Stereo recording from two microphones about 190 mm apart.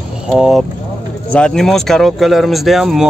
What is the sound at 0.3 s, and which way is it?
Speech, centre (ahead or behind).